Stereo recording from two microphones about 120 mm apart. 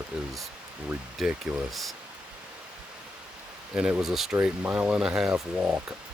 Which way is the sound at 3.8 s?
10° right (ahead or behind).